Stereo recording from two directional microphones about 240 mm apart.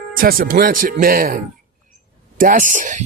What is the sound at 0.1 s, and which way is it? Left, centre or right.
Speech, right.